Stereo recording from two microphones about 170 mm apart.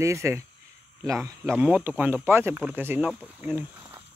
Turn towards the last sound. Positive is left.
turn(degrees=-10)  # may be behind; listen again after turning